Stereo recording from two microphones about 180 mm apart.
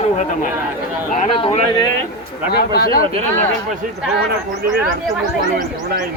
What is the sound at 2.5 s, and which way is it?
Speech, 60° left (ahead or behind).